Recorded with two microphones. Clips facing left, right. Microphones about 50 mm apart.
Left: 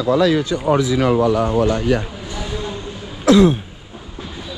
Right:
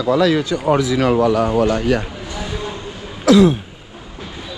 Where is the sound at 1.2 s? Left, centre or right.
Right.